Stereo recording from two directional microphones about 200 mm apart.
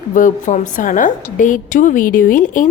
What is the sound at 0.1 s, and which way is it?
A woman's voice, 40° left (ahead or behind).